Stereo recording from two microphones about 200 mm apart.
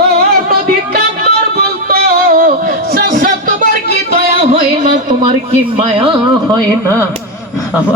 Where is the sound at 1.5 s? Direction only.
50° right (ahead or behind).